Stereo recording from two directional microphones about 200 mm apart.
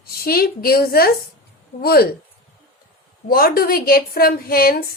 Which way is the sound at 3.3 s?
50° left (ahead or behind).